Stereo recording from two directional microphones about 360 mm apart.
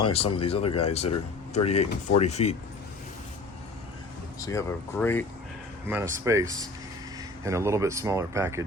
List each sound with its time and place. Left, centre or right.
0.0 s speech: centre
4.4 s speech: centre
5.9 s speech: centre